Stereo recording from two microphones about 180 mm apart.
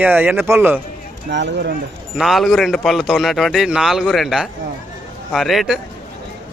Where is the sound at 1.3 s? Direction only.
80° right.